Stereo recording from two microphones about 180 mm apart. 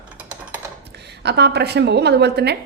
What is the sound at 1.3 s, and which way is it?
A woman's voice, 70° right (ahead or behind).